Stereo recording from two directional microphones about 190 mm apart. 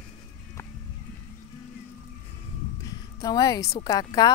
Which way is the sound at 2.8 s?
20° left (ahead or behind).